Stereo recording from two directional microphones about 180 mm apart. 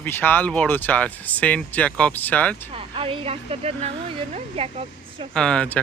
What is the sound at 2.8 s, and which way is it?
Speech, 30° right (ahead or behind).